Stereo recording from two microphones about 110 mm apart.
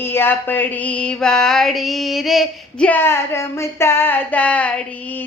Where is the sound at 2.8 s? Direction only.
15° left (ahead or behind).